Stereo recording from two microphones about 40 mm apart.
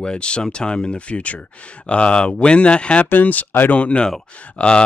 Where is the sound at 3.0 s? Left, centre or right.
Left.